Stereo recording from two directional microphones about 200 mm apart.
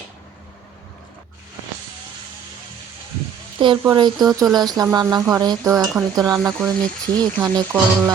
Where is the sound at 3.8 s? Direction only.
20° right (ahead or behind).